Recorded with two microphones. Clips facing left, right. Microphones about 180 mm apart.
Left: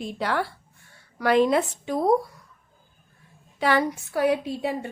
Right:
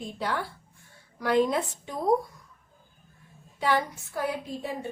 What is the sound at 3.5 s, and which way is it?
A woman's voice, 80° left.